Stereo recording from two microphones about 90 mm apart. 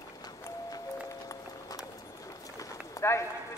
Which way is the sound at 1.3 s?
45° left (ahead or behind).